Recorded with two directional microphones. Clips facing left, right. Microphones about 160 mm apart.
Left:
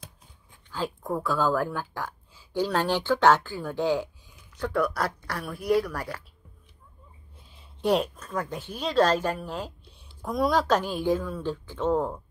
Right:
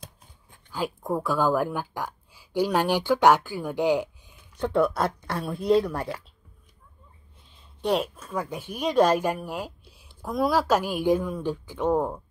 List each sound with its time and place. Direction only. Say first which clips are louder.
0.7 s speech: right 2 dB; 15° right (ahead or behind)
7.8 s speech: left 1 dB; centre (ahead or behind)